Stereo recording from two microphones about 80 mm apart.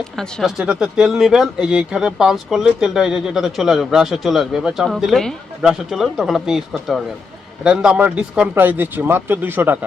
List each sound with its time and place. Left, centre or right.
0.2 s speech: centre
0.5 s a man's voice: centre; by 9.7 s right